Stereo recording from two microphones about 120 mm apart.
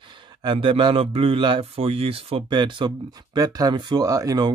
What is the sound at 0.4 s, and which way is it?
Speech, 40° right (ahead or behind).